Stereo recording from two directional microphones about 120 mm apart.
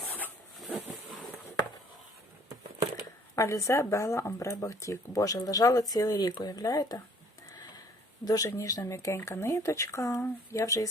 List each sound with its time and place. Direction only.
3.3 s speech: 25° left (ahead or behind)
8.2 s speech: 30° left (ahead or behind)